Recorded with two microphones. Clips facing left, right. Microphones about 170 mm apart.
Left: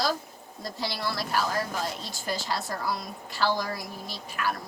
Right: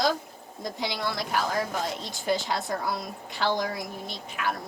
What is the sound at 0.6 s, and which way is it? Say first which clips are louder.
Speech: right 1 dB; 20° right (ahead or behind).